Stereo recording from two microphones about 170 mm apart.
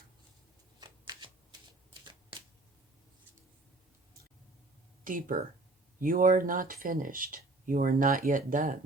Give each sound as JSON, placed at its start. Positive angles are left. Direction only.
{"t": 0.8, "sound": "shuffling cards", "side_deg": -25}
{"t": 5.0, "sound": "speech", "side_deg": -55}